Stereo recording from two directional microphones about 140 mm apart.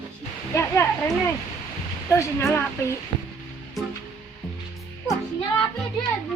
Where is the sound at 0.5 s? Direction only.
15° left (ahead or behind).